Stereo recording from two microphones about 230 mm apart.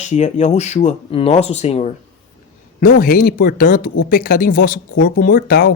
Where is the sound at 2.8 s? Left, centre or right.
Left.